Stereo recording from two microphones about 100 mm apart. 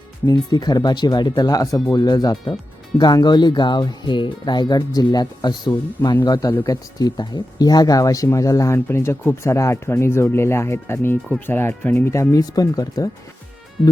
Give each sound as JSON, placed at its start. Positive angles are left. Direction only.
{"t": 0.3, "sound": "speech", "side_deg": 45}
{"t": 6.5, "sound": "speech", "side_deg": 30}
{"t": 7.0, "sound": "speech", "side_deg": 40}
{"t": 12.1, "sound": "speech", "side_deg": 30}